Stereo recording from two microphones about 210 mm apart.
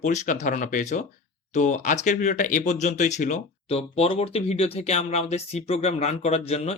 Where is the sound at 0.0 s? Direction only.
35° left (ahead or behind).